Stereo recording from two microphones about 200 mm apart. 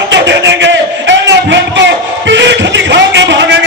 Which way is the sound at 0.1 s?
60° right (ahead or behind).